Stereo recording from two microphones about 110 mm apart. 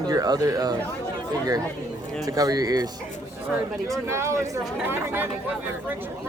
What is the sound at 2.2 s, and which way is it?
Speech, 35° right (ahead or behind).